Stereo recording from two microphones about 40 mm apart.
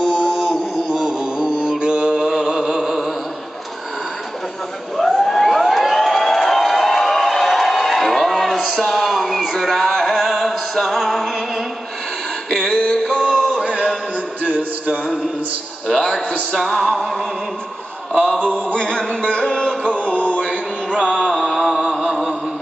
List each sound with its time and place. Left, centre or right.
0.1 s mantra: centre
1.8 s mantra: right
2.2 s chant: centre
4.9 s a sound: centre
10.5 s music: centre
12.4 s male singing: centre
14.4 s music: right
16.3 s music: centre
18.7 s music: left
21.5 s a sound: centre